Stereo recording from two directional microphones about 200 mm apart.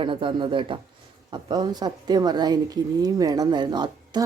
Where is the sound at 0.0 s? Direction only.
25° right (ahead or behind).